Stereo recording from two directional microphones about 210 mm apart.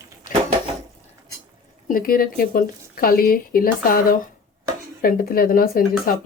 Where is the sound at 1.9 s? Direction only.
45° left (ahead or behind).